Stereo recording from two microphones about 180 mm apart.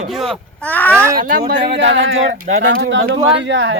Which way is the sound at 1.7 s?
80° right.